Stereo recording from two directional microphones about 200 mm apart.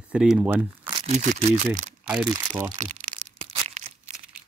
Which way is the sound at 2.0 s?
5° right (ahead or behind).